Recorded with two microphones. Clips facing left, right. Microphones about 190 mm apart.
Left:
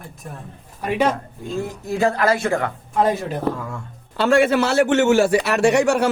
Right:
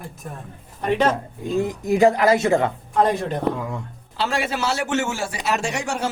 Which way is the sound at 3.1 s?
5° left (ahead or behind).